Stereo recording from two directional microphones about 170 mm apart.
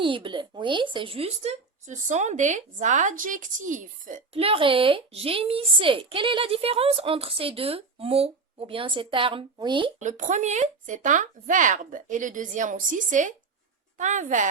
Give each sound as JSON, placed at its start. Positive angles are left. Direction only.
{"t": 0.0, "sound": "speech", "side_deg": -30}
{"t": 4.4, "sound": "a woman's voice", "side_deg": -35}
{"t": 10.0, "sound": "speech", "side_deg": -45}